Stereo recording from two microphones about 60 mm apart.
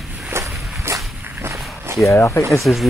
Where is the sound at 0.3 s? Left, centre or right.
Right.